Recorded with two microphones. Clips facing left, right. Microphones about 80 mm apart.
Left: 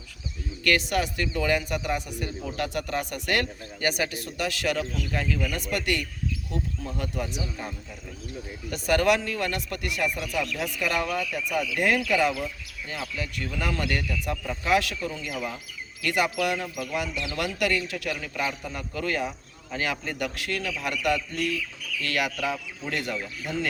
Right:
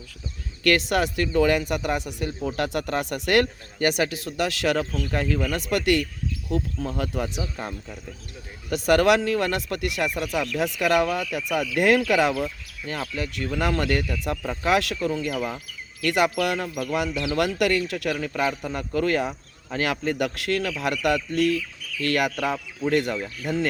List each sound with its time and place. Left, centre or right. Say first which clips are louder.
0.7 s speech: right 3 dB; right
1.3 s speech: right 8 dB; right
1.6 s speech: right 3 dB; right
4.8 s speech: right 3 dB; right
5.5 s speech: right 6 dB; right
6.8 s speech: right 4 dB; right
8.7 s speech: right 4 dB; right
13.0 s speech: right 3 dB; right
15.1 s speech: right 6 dB; right
19.7 s speech: right 5 dB; right
22.0 s speech: right 5 dB; right